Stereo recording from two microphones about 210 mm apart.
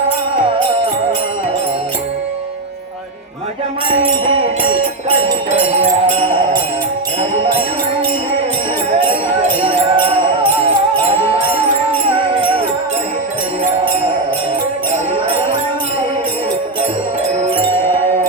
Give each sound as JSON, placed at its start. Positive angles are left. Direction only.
{"t": 5.0, "sound": "music", "side_deg": -25}
{"t": 9.0, "sound": "music", "side_deg": -30}